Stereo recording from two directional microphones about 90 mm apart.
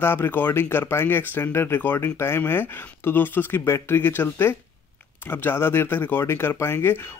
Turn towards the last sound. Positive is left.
turn(degrees=25)  # may be behind; listen again after turning